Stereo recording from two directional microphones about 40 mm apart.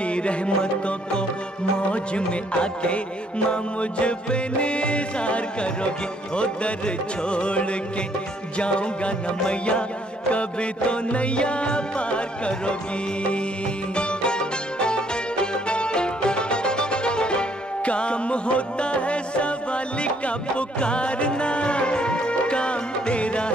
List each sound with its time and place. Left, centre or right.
0.0 s music: left
13.9 s music: left